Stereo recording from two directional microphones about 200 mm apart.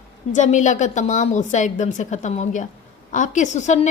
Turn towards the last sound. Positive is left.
turn(degrees=35)  # may be behind; listen again after turning